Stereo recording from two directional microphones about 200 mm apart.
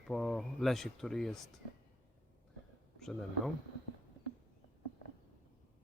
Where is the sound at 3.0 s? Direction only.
Centre (ahead or behind).